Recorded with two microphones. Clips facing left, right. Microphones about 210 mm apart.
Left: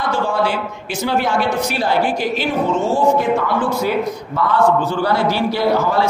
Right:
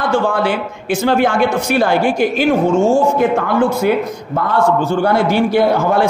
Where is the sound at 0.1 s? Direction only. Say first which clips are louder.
Right 3 dB; 55° right (ahead or behind).